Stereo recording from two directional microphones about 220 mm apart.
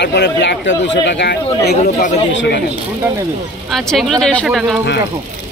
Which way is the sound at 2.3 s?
55° left (ahead or behind).